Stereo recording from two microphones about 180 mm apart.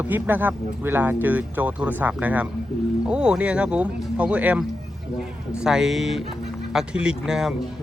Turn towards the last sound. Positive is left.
turn(degrees=-5)  # may be behind; listen again after turning